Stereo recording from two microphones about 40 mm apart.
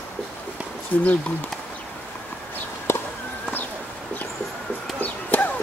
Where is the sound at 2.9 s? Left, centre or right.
Left.